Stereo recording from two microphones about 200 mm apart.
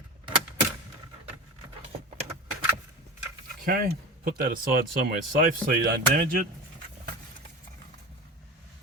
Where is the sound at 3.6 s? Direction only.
45° right (ahead or behind).